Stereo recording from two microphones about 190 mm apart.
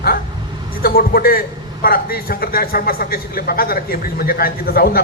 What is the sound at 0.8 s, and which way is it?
Speech, 50° left (ahead or behind).